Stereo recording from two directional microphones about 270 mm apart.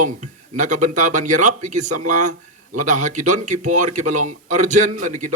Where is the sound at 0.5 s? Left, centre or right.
Right.